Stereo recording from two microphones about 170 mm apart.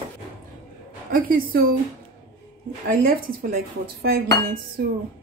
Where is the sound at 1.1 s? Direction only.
60° right (ahead or behind).